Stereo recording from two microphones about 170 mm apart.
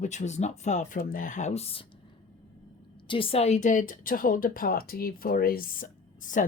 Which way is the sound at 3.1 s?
30° left (ahead or behind).